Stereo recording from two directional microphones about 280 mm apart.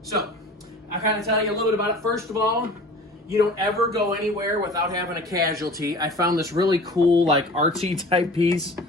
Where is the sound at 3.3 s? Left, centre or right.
Centre.